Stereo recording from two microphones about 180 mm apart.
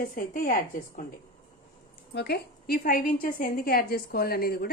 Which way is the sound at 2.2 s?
65° left (ahead or behind).